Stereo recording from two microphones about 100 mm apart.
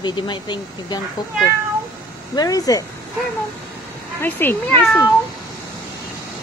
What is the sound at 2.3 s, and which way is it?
Speech, 40° left (ahead or behind).